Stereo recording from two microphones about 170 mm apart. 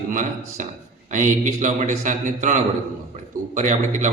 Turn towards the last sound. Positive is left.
turn(degrees=-45)  # may be behind; listen again after turning